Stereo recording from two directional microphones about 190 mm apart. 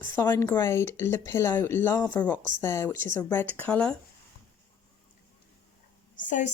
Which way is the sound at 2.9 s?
45° right (ahead or behind).